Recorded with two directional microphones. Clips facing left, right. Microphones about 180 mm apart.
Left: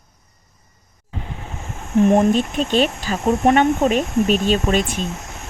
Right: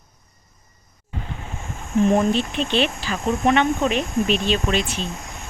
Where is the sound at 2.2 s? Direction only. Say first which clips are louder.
Left 4 dB; 45° left (ahead or behind).